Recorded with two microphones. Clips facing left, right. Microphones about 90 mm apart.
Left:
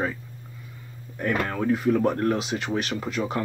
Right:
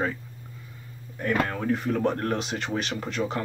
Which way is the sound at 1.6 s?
5° left (ahead or behind).